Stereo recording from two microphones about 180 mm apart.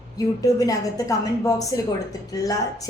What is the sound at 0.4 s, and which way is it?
A woman's voice, 20° left (ahead or behind).